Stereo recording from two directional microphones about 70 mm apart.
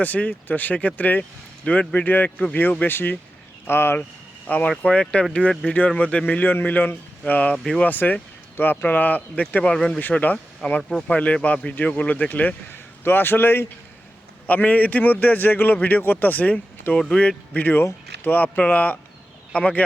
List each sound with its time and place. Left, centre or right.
0.0 s a man's voice: left
4.4 s a man's voice: left
9.7 s speech: centre
10.0 s a man's voice: left
10.6 s speech: centre
11.1 s a man's voice: centre